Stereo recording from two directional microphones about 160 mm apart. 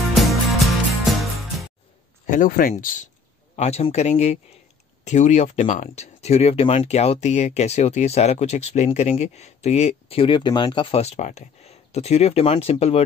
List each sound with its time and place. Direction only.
0.1 s music: centre (ahead or behind)
2.2 s speech: 55° left (ahead or behind)
3.5 s speech: 45° left (ahead or behind)